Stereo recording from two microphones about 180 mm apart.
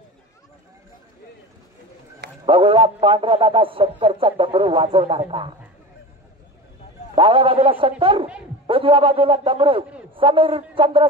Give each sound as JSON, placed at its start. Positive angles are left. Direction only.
{"t": 2.4, "sound": "a man's voice", "side_deg": -30}
{"t": 7.2, "sound": "a man's voice", "side_deg": -30}